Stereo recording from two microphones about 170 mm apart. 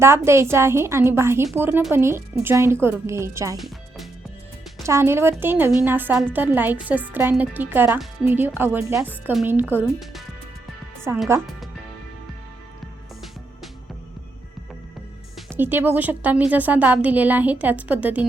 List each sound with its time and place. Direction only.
0.0 s a woman's voice: 15° right (ahead or behind)
3.6 s music: centre (ahead or behind)
4.8 s a woman's voice: 15° right (ahead or behind)
15.4 s a woman's voice: 10° right (ahead or behind)